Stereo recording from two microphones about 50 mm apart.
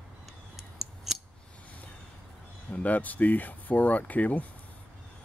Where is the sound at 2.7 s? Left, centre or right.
Left.